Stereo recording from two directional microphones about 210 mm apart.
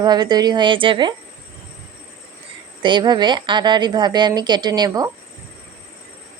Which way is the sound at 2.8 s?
20° right (ahead or behind).